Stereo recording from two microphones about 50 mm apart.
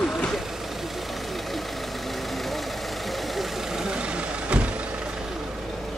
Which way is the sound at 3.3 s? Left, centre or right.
Centre.